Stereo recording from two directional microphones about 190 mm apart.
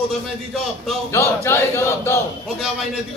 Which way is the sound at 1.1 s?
15° left (ahead or behind).